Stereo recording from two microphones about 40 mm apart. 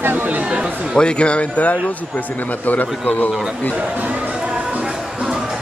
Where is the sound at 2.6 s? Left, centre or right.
Left.